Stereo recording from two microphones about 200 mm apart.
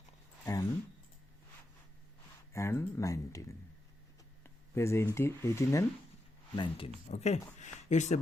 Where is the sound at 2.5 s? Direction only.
15° left (ahead or behind).